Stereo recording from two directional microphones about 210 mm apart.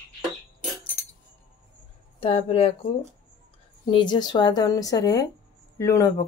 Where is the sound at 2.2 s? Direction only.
30° left (ahead or behind).